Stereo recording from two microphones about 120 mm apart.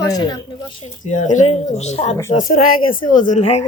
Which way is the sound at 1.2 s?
90° left.